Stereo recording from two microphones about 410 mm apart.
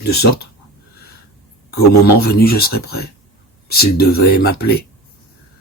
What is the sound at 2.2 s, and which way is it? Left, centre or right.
Speech, left.